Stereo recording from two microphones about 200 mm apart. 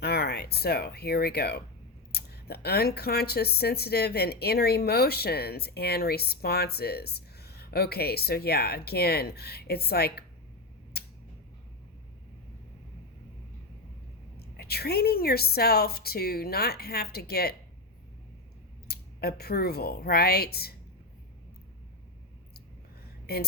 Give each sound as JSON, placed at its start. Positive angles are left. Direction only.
{"t": 0.0, "sound": "speech", "side_deg": 55}
{"t": 14.3, "sound": "speech", "side_deg": 50}
{"t": 18.9, "sound": "speech", "side_deg": 50}
{"t": 23.3, "sound": "speech", "side_deg": 50}